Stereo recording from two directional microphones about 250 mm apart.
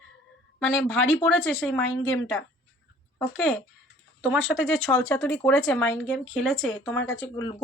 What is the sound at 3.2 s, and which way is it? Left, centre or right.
Speech, centre.